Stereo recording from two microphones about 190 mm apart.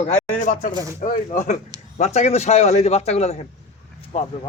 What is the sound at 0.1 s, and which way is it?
Speech, 40° left (ahead or behind).